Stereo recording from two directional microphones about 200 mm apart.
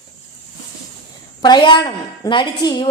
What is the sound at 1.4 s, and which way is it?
A woman's voice, 20° left (ahead or behind).